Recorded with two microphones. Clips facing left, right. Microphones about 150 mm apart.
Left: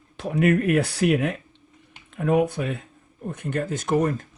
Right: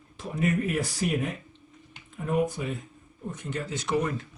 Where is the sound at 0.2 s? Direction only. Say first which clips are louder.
Left 7 dB; 70° left (ahead or behind).